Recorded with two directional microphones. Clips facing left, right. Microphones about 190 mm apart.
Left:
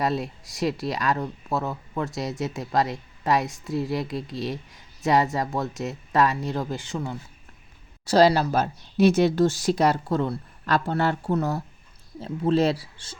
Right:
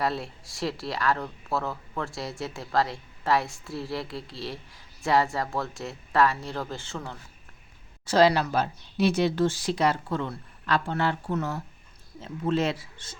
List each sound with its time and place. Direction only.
0.0 s speech: 20° left (ahead or behind)
8.0 s speech: 35° left (ahead or behind)
8.5 s speech: 45° left (ahead or behind)